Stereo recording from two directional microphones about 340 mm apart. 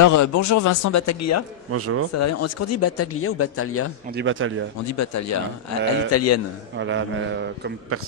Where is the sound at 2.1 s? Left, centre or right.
Left.